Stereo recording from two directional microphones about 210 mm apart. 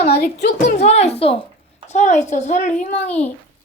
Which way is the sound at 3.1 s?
5° left (ahead or behind).